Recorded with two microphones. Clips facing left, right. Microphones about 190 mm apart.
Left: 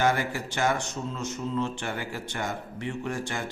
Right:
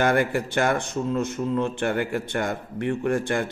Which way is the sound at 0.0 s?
55° right (ahead or behind).